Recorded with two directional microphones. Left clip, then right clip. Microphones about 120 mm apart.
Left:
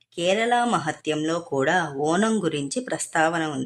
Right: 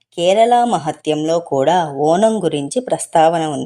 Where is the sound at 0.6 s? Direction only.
15° right (ahead or behind).